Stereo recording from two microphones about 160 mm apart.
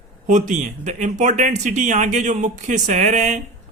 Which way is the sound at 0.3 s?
50° right (ahead or behind).